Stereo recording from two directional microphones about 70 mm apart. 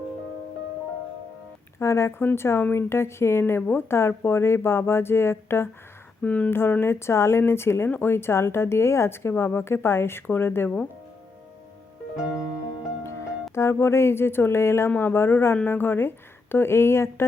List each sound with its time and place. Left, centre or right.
1.8 s speech: left
6.2 s a woman's voice: centre
6.5 s speech: left
13.0 s music: left
13.5 s speech: left